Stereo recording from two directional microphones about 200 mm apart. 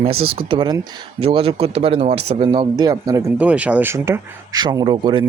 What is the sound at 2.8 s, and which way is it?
Speech, 20° right (ahead or behind).